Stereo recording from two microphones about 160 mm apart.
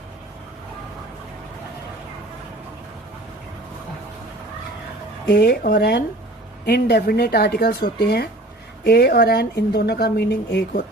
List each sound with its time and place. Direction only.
5.3 s speech: 90° left